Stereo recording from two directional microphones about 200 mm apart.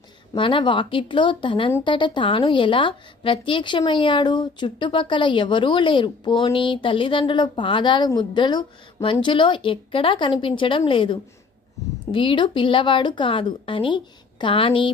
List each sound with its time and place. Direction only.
0.3 s a woman's voice: 25° left (ahead or behind)